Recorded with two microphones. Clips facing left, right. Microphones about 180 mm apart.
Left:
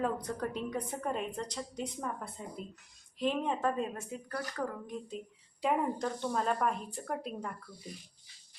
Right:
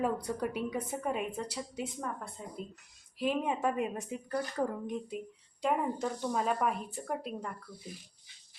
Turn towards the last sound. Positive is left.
turn(degrees=0)  # may be behind; listen again after turning